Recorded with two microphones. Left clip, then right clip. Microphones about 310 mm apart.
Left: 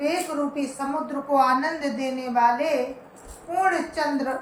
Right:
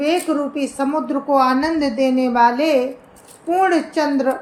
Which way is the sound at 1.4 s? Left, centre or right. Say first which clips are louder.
Right 3 dB; centre.